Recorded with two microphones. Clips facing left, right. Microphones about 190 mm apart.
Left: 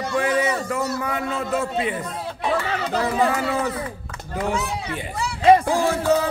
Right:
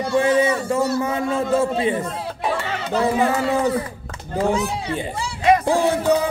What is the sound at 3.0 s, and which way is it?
A man's voice, 30° right (ahead or behind).